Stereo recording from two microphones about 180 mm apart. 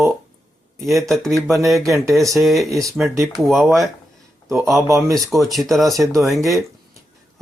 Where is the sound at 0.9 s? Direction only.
Centre (ahead or behind).